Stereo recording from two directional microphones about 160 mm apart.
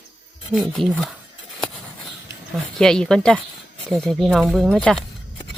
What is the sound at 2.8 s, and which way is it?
Speech, 5° left (ahead or behind).